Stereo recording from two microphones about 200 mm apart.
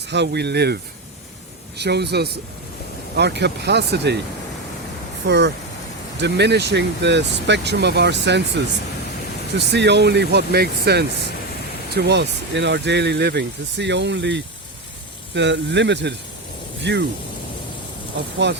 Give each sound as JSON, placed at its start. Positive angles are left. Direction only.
{"t": 0.1, "sound": "speech", "side_deg": -55}
{"t": 1.8, "sound": "speech", "side_deg": -55}
{"t": 5.2, "sound": "speech", "side_deg": -60}
{"t": 9.7, "sound": "speech", "side_deg": -60}
{"t": 18.4, "sound": "speech", "side_deg": -60}